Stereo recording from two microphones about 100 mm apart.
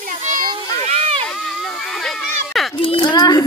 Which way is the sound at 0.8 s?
90° right.